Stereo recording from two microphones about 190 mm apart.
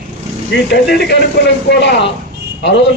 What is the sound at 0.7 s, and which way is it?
A man's voice, 65° left (ahead or behind).